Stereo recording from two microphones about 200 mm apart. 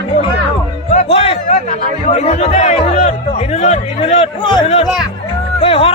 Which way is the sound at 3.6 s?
30° left (ahead or behind).